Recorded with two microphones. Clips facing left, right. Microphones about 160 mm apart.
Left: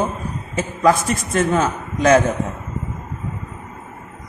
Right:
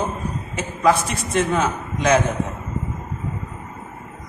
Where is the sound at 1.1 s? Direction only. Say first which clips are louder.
Left 2 dB; 45° left (ahead or behind).